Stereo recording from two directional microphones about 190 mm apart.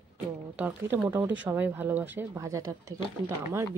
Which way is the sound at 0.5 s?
5° right (ahead or behind).